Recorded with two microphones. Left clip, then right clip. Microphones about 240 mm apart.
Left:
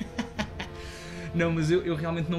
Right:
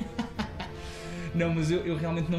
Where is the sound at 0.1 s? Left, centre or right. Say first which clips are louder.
Left 1 dB; left.